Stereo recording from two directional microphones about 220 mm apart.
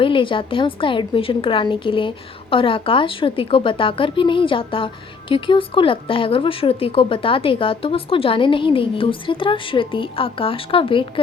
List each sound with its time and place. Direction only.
0.0 s speech: 25° left (ahead or behind)